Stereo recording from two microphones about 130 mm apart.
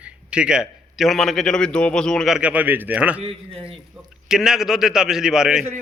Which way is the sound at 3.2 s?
50° right (ahead or behind).